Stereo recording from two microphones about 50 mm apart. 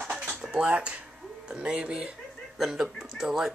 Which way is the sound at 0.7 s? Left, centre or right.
Right.